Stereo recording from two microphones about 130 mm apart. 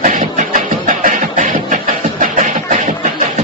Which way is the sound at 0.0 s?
75° right (ahead or behind).